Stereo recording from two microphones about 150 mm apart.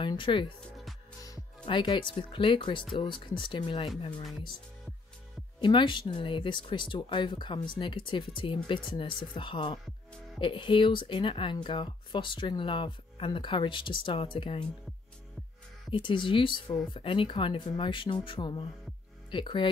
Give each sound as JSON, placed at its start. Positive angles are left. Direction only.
{"t": 0.0, "sound": "speech", "side_deg": 35}
{"t": 5.6, "sound": "speech", "side_deg": 30}
{"t": 15.9, "sound": "speech", "side_deg": 35}